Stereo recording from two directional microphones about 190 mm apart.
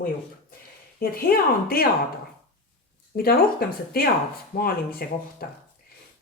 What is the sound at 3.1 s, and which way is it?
Speech, 50° left (ahead or behind).